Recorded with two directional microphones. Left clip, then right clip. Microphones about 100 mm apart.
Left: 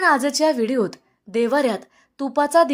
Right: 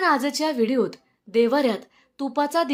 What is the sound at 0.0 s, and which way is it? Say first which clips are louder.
A woman's voice: left 4 dB; 35° left (ahead or behind).